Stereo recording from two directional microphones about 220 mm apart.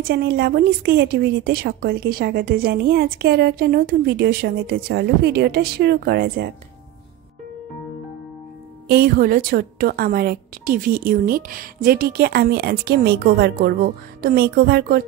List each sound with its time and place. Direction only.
0.0 s a woman's voice: 45° right (ahead or behind)
8.8 s a woman's voice: 45° right (ahead or behind)